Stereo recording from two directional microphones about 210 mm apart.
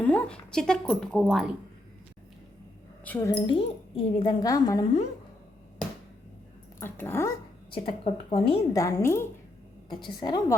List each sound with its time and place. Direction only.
0.0 s a woman's voice: 5° left (ahead or behind)
3.0 s a woman's voice: 10° left (ahead or behind)
3.4 s speech: 25° left (ahead or behind)
6.7 s speech: 10° left (ahead or behind)
7.7 s speech: 25° left (ahead or behind)
8.7 s speech: 15° left (ahead or behind)